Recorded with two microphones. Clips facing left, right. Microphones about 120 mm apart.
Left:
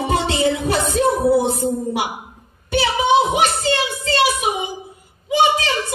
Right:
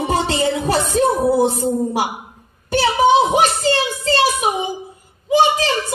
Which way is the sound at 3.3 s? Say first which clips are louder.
Right 2 dB; 40° right (ahead or behind).